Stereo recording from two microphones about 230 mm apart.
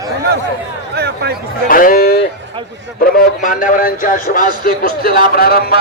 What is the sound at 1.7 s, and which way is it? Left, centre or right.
Speech, left.